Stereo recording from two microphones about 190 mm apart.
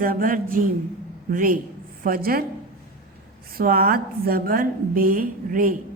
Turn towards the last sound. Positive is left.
turn(degrees=-45)  # may be behind; listen again after turning